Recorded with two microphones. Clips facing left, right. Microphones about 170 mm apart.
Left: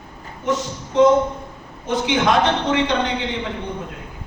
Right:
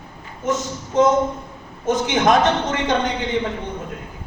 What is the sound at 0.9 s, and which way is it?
A man's voice, 45° right (ahead or behind).